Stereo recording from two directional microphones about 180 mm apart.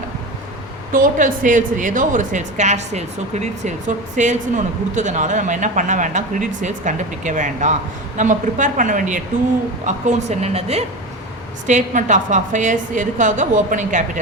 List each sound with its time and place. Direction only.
0.9 s a woman's voice: 50° right (ahead or behind)